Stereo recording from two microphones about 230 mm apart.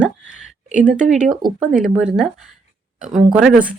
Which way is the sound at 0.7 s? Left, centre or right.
Right.